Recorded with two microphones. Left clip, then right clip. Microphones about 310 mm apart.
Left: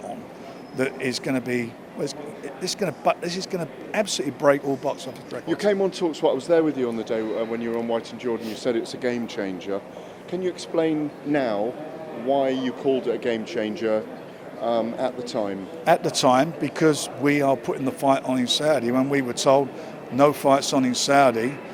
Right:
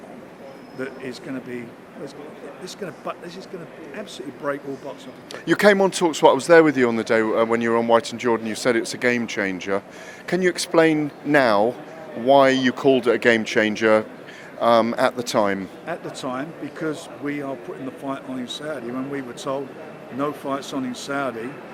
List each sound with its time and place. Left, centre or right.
0.8 s speech: left
5.3 s speech: right
8.6 s speech: right
10.2 s speech: right
12.3 s speech: right
15.9 s speech: left